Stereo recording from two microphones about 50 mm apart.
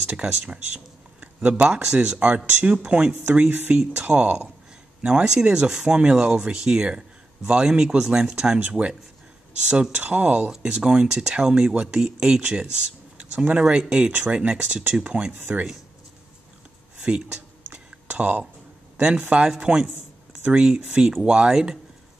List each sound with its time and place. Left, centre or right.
0.0 s speech: right
1.7 s speech: centre
3.3 s speech: right
9.9 s speech: right
10.5 s speech: centre
15.3 s speech: right
18.1 s speech: right
18.9 s speech: centre